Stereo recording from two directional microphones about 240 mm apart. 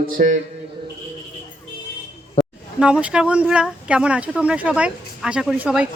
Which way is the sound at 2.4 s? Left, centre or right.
Left.